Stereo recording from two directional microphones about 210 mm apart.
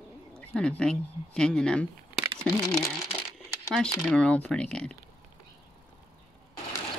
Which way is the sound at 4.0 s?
5° left (ahead or behind).